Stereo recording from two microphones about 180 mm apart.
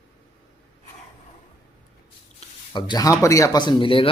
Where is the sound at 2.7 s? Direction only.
25° left (ahead or behind).